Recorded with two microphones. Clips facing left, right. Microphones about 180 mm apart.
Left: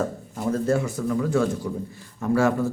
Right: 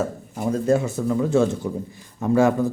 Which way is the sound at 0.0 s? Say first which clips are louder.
Right 1 dB; 15° right (ahead or behind).